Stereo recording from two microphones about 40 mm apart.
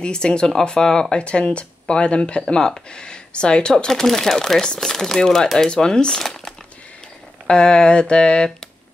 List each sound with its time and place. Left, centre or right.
0.0 s speech: left
1.1 s speech: left
6.2 s crumpling: centre
7.4 s speech: left